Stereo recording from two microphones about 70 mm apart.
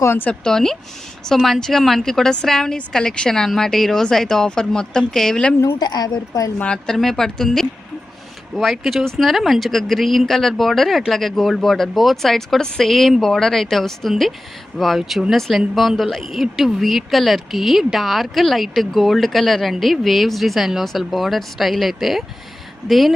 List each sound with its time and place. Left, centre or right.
0.0 s speech: left
0.3 s a woman's voice: centre
5.8 s a woman's voice: left
6.6 s a woman's voice: centre